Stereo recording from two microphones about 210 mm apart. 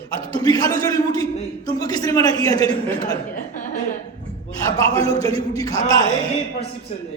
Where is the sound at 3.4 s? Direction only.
40° left (ahead or behind).